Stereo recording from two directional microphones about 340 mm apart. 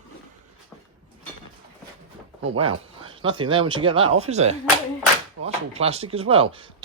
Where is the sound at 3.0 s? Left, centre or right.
Centre.